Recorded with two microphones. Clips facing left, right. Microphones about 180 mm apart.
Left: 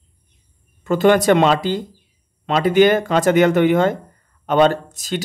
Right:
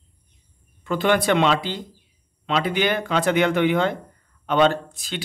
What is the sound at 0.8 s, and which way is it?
Speech, 45° left (ahead or behind).